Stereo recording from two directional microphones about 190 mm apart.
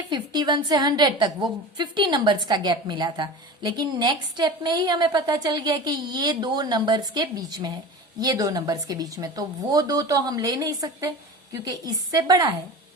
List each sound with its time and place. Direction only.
0.1 s a woman's voice: 20° right (ahead or behind)